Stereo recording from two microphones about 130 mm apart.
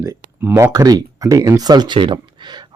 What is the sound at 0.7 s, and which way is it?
Speech, 30° right (ahead or behind).